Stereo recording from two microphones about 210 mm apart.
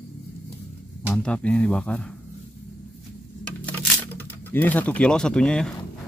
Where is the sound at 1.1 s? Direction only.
5° left (ahead or behind).